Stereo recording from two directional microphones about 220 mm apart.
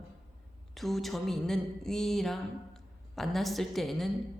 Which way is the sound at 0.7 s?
Centre (ahead or behind).